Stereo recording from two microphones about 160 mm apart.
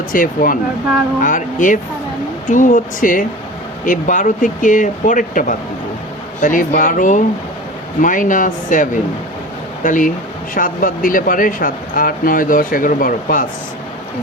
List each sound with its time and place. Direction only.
0.1 s speech: 60° left (ahead or behind)